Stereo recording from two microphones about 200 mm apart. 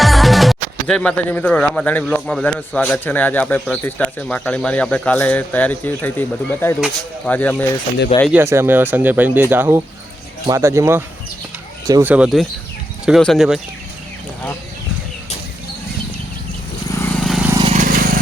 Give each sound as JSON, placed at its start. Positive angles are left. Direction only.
{"t": 0.0, "sound": "speech", "side_deg": 0}
{"t": 8.3, "sound": "speech", "side_deg": -10}
{"t": 16.9, "sound": "vehicle", "side_deg": 15}
{"t": 17.2, "sound": "vehicle", "side_deg": 0}
{"t": 17.6, "sound": "vehicle", "side_deg": -35}